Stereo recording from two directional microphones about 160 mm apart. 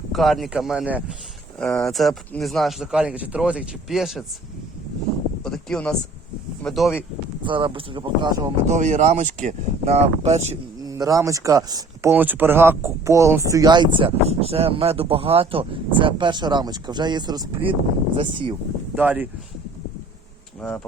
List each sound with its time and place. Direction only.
0.1 s speech: centre (ahead or behind)
5.4 s speech: 5° left (ahead or behind)
7.4 s speech: 30° right (ahead or behind)
8.6 s speech: 45° right (ahead or behind)
10.8 s speech: 20° right (ahead or behind)
12.1 s speech: 10° right (ahead or behind)
18.9 s speech: 10° right (ahead or behind)
20.6 s speech: 5° left (ahead or behind)